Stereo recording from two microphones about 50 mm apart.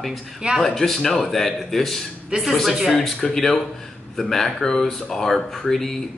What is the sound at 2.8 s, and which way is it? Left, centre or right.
Speech, centre.